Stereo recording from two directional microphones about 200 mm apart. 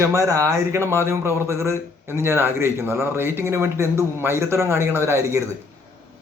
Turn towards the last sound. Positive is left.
turn(degrees=-15)  # may be behind; listen again after turning